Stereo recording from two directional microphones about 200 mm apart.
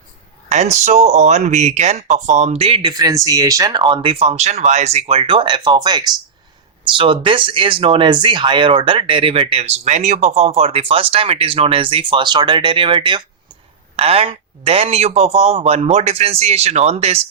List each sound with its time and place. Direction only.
0.4 s speech: 35° right (ahead or behind)